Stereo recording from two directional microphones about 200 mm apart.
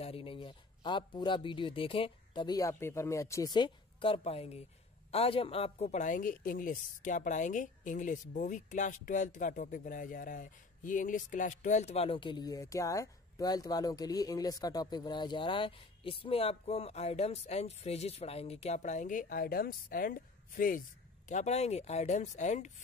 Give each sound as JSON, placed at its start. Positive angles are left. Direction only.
{"t": 0.0, "sound": "a man's voice", "side_deg": 25}